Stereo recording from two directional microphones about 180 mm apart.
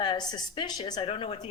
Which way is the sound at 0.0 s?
25° left (ahead or behind).